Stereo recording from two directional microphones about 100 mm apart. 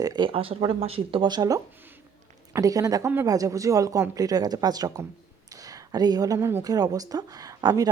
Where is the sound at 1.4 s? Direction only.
35° right (ahead or behind).